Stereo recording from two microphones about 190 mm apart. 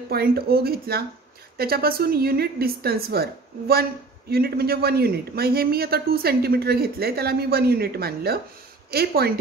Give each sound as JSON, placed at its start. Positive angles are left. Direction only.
{"t": 0.1, "sound": "a man's voice", "side_deg": -55}